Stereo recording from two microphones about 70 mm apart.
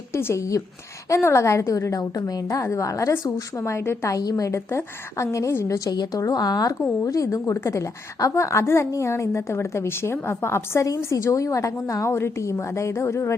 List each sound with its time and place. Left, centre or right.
0.1 s a woman's voice: left
3.7 s a woman's voice: left
4.2 s a woman's voice: left
4.4 s a woman's voice: left
5.9 s a woman's voice: left
7.1 s a woman's voice: left